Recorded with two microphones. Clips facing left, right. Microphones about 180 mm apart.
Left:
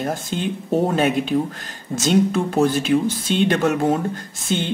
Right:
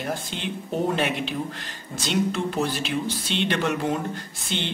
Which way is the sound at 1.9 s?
45° left (ahead or behind).